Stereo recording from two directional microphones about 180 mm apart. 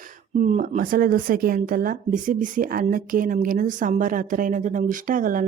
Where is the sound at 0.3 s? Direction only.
40° right (ahead or behind).